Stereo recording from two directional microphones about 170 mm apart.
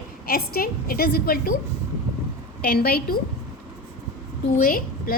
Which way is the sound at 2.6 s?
65° left (ahead or behind).